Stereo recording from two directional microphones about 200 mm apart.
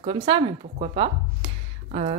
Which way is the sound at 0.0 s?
30° right (ahead or behind).